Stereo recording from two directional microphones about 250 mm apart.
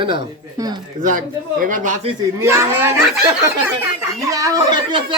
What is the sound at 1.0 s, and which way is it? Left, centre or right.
Speech, right.